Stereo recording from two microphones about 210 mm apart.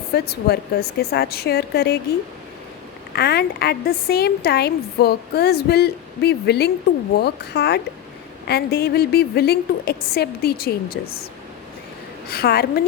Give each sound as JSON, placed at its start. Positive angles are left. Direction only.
{"t": 0.1, "sound": "a woman's voice", "side_deg": 50}
{"t": 3.1, "sound": "a woman's voice", "side_deg": 50}
{"t": 12.3, "sound": "a woman's voice", "side_deg": 50}